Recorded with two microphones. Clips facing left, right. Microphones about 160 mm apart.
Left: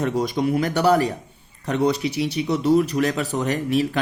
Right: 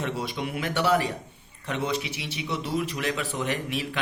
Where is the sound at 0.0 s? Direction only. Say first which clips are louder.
Left 9 dB; 40° left (ahead or behind).